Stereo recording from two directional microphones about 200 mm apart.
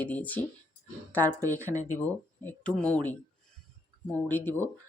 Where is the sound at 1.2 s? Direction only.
15° right (ahead or behind).